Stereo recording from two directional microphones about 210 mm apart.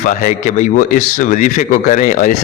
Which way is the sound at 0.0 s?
40° left (ahead or behind).